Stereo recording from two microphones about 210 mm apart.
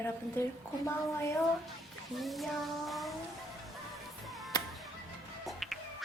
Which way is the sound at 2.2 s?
Centre (ahead or behind).